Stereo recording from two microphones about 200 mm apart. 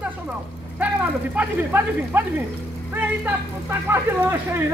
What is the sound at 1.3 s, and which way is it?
Speech, 10° right (ahead or behind).